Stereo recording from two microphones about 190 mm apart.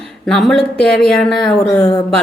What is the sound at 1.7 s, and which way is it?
Speech, 20° left (ahead or behind).